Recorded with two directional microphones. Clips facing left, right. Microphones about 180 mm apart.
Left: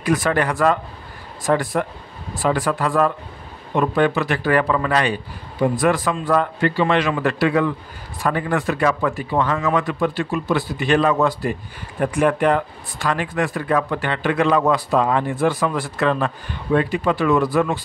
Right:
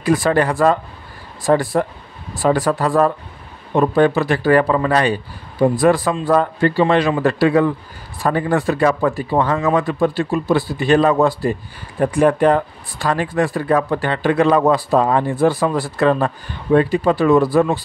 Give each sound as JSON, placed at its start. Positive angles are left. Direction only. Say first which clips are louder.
{"t": 0.0, "sound": "speech", "louder": "right 4 dB", "side_deg": -30}